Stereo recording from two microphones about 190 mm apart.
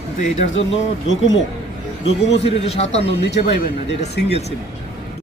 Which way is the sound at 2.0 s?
35° left (ahead or behind).